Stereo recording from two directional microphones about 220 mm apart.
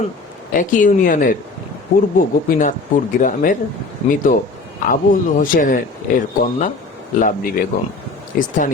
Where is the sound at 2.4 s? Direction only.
35° left (ahead or behind).